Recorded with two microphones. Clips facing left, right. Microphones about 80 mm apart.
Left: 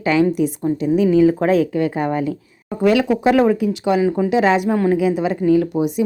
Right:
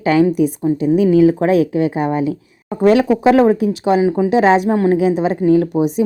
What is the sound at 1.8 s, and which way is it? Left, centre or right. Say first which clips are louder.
Speech: right 3 dB; centre.